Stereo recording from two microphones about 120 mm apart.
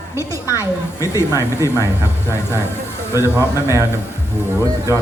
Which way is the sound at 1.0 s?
20° left (ahead or behind).